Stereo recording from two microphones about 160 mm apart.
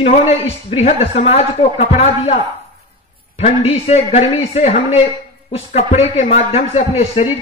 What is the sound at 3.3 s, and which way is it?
A man's voice, 40° left (ahead or behind).